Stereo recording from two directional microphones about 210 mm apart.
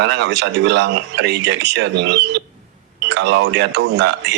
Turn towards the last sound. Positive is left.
turn(degrees=-55)  # may be behind; listen again after turning